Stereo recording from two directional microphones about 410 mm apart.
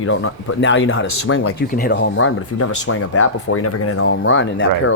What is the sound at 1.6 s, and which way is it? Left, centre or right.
Speech, left.